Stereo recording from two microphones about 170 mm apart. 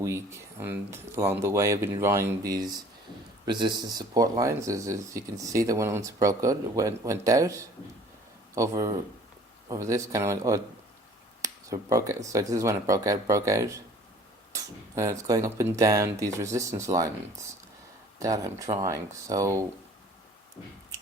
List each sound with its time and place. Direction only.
0.0 s speech: 15° right (ahead or behind)
18.2 s speech: 20° right (ahead or behind)